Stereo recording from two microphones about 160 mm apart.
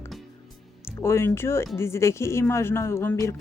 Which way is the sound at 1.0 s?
15° left (ahead or behind).